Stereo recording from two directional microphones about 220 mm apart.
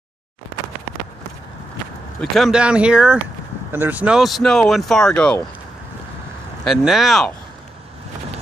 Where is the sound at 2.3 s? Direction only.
Centre (ahead or behind).